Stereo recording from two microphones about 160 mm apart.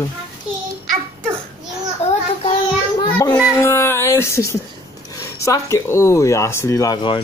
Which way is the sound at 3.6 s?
15° left (ahead or behind).